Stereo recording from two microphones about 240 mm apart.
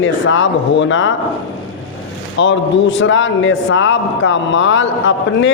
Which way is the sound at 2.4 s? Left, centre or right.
Left.